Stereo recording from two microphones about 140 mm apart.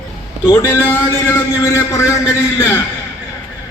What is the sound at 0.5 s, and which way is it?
A man's voice, 15° left (ahead or behind).